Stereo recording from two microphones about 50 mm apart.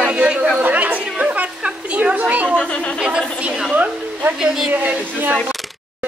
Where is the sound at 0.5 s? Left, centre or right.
Right.